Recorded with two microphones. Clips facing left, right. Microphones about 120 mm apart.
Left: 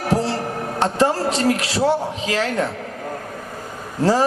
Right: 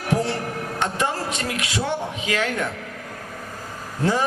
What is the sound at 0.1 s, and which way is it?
Music, 35° left (ahead or behind).